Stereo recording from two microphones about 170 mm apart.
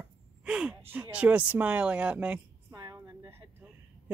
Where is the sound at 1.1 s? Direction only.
10° right (ahead or behind).